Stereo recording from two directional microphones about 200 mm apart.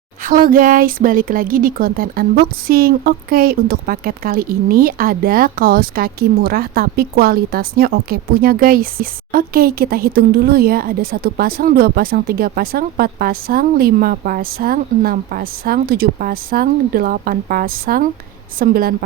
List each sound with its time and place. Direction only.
0.3 s speech: 45° right (ahead or behind)